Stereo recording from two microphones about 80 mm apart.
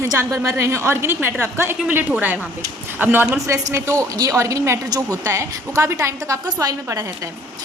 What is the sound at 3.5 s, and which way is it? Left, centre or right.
A woman's voice, right.